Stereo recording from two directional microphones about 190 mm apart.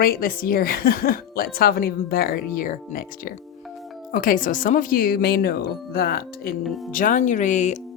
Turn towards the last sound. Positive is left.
turn(degrees=40)  # may be behind; listen again after turning